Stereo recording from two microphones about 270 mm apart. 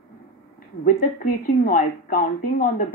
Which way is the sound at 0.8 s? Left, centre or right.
Left.